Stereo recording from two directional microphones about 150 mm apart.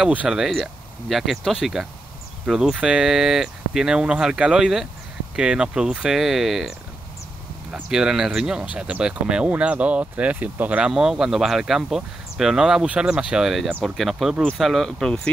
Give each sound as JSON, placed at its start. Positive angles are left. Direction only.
{"t": 0.0, "sound": "speech", "side_deg": -5}
{"t": 7.7, "sound": "speech", "side_deg": -5}